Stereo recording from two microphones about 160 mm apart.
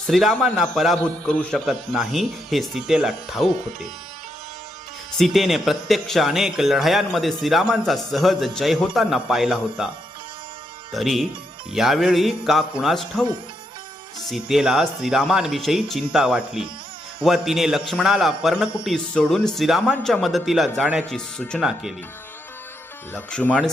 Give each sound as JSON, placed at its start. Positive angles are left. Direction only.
{"t": 0.1, "sound": "speech", "side_deg": 0}
{"t": 5.1, "sound": "speech", "side_deg": 0}
{"t": 10.9, "sound": "speech", "side_deg": 0}
{"t": 14.3, "sound": "speech", "side_deg": 0}
{"t": 23.1, "sound": "speech", "side_deg": 10}